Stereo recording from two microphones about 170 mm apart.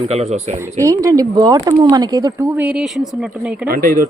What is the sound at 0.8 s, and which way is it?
Speech, 20° right (ahead or behind).